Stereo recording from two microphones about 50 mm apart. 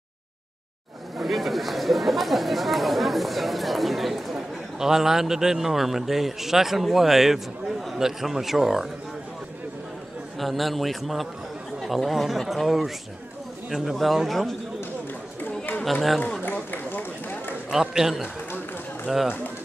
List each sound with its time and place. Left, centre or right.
1.1 s chatter: centre
7.9 s a man's voice: centre
10.4 s a man's voice: centre
15.8 s speech: centre
16.4 s run: left
17.6 s a man's voice: centre